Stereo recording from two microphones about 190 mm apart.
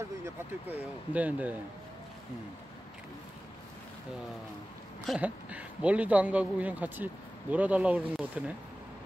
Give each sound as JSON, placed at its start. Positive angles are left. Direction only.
{"t": 0.2, "sound": "speech", "side_deg": -10}
{"t": 5.0, "sound": "speech", "side_deg": -5}